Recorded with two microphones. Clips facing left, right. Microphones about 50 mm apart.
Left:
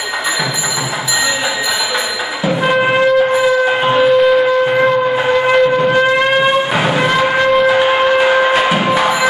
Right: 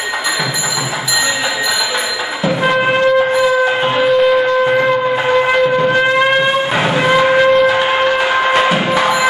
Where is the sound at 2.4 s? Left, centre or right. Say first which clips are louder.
Even; centre.